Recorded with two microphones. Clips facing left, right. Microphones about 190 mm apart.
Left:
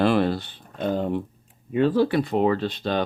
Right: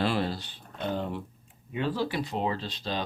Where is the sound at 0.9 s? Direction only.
40° left (ahead or behind); by 3.0 s 60° left (ahead or behind).